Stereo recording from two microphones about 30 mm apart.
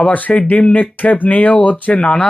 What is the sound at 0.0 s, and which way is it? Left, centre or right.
Speech, left.